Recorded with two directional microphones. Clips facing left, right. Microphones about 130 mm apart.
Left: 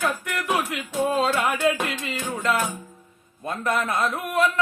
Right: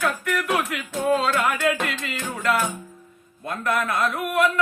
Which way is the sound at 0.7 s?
20° left (ahead or behind).